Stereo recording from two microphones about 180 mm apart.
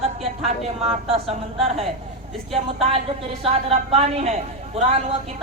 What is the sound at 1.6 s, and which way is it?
Speech, 35° right (ahead or behind).